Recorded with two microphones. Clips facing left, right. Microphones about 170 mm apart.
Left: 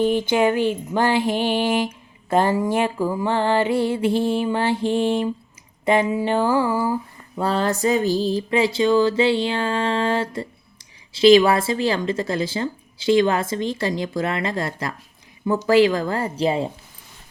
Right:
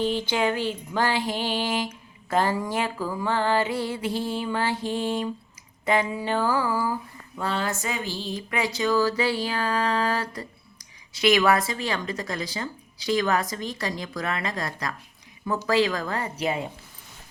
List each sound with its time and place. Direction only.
0.3 s speech: 20° left (ahead or behind)
7.3 s speech: 35° left (ahead or behind)